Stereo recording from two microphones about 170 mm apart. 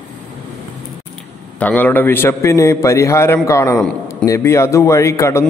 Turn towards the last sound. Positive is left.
turn(degrees=15)  # may be behind; listen again after turning